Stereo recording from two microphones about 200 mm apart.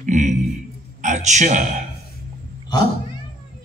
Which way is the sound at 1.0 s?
35° right (ahead or behind).